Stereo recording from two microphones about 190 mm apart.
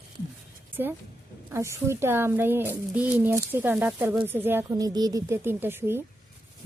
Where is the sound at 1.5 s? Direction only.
15° right (ahead or behind).